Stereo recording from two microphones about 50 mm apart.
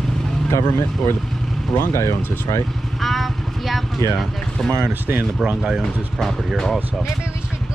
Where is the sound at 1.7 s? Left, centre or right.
Left.